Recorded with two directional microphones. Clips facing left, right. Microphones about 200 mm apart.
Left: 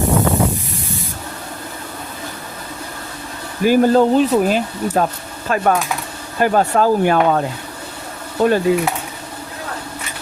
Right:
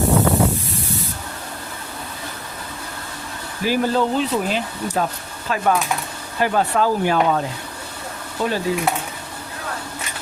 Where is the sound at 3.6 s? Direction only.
50° left (ahead or behind).